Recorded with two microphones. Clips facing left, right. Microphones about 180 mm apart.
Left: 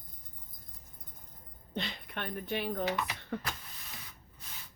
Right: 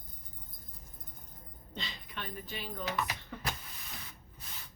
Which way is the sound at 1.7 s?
55° left (ahead or behind).